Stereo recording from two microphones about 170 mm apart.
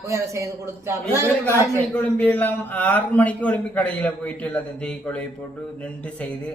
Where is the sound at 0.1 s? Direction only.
15° right (ahead or behind).